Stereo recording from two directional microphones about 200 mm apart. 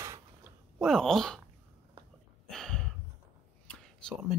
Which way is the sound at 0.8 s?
Centre (ahead or behind).